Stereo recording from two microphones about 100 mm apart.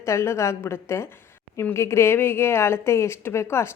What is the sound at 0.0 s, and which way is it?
Speech, 30° left (ahead or behind).